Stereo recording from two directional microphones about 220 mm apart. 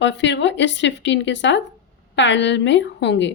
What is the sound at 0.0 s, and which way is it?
Speech, 55° left (ahead or behind).